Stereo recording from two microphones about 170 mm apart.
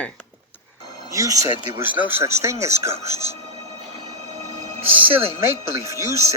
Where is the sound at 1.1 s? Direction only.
20° right (ahead or behind).